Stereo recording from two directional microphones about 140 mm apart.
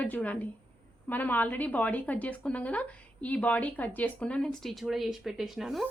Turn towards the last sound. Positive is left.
turn(degrees=0)  # may be behind; listen again after turning